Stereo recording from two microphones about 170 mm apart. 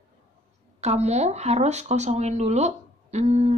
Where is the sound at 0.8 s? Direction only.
40° right (ahead or behind).